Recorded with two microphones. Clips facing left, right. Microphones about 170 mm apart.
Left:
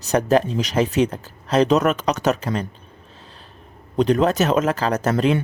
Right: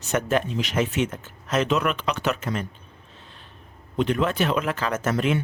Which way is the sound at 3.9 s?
40° left (ahead or behind).